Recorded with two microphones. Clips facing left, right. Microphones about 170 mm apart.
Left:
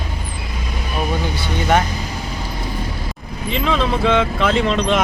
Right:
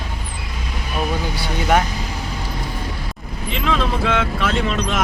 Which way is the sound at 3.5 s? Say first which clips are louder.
Left 2 dB; centre (ahead or behind).